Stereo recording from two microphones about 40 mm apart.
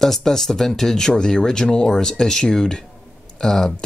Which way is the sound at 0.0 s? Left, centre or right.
Centre.